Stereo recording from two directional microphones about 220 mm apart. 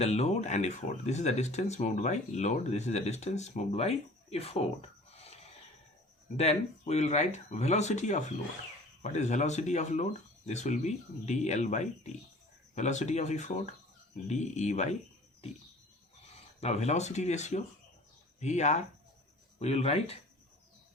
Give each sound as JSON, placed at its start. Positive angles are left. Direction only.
{"t": 0.0, "sound": "speech", "side_deg": 30}
{"t": 16.3, "sound": "speech", "side_deg": 30}